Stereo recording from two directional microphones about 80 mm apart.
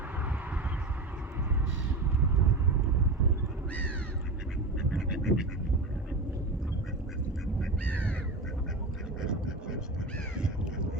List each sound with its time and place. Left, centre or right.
4.8 s duck: centre
7.9 s crow: centre
9.2 s vehicle: centre
10.3 s crow: centre